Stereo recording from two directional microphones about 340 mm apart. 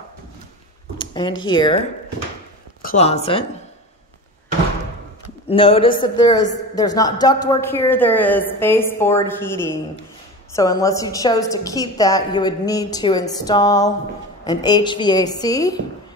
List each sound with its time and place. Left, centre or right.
0.9 s a sound: centre
1.5 s a man's voice: centre
2.8 s speech: left
5.5 s a man's voice: centre